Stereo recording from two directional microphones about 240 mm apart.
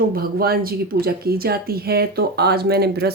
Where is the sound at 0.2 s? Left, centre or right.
Right.